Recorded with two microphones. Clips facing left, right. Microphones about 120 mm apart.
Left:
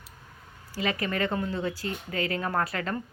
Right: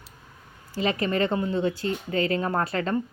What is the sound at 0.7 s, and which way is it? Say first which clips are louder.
Speech: right 4 dB; 25° right (ahead or behind).